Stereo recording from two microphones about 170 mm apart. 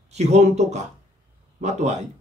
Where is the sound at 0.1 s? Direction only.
40° right (ahead or behind).